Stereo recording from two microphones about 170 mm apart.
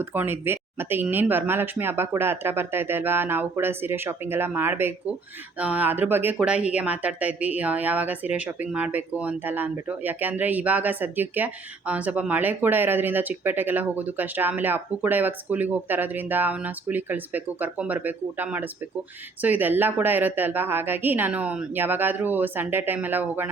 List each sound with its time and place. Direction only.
0.1 s speech: 15° right (ahead or behind)